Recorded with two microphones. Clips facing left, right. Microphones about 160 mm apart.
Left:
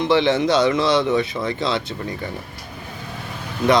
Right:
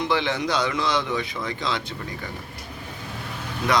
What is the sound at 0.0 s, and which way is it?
Speech, 25° left (ahead or behind).